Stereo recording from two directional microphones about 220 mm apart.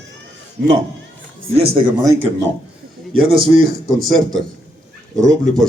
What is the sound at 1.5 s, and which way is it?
Speech, 25° right (ahead or behind).